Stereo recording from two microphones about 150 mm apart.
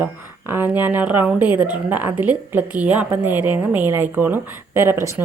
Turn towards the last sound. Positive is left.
turn(degrees=-15)  # may be behind; listen again after turning